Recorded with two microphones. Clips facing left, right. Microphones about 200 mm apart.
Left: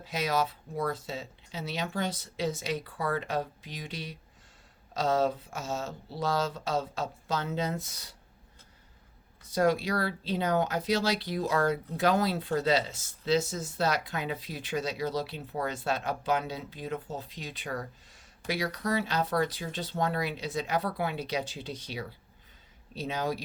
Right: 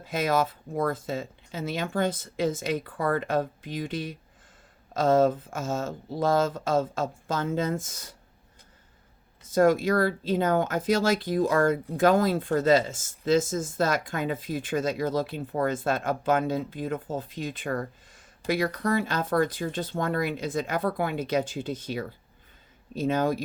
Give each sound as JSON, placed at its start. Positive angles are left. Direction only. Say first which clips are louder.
{"t": 0.0, "sound": "speech", "louder": "right 4 dB", "side_deg": -50}
{"t": 9.5, "sound": "speech", "louder": "right 5 dB", "side_deg": -50}